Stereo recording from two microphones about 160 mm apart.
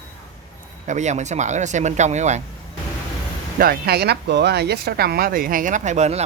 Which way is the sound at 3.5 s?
75° right (ahead or behind).